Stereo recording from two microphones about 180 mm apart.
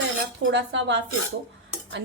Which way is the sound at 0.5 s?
85° right.